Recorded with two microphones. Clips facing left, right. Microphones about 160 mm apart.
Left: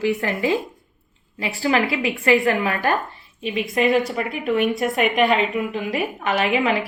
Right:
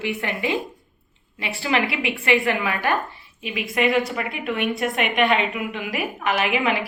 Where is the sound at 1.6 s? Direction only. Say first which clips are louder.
Left 3 dB; 35° left (ahead or behind).